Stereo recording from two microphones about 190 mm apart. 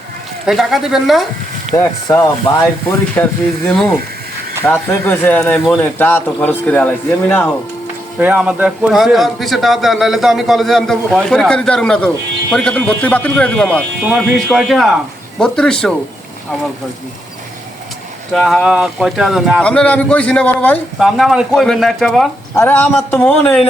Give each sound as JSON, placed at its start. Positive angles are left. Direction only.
{"t": 0.4, "sound": "a man's voice", "side_deg": 0}
{"t": 1.7, "sound": "speech", "side_deg": 15}
{"t": 8.2, "sound": "a man's voice", "side_deg": -5}
{"t": 18.3, "sound": "a man's voice", "side_deg": 0}
{"t": 22.5, "sound": "speech", "side_deg": 10}